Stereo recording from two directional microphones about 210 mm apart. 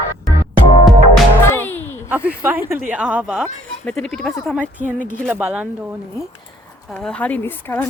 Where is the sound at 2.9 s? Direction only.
5° right (ahead or behind).